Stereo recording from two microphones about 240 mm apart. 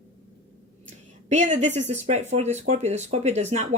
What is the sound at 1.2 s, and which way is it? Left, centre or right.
Speech, right.